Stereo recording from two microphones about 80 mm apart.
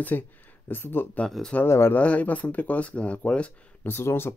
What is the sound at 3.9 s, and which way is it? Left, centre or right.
Speech, left.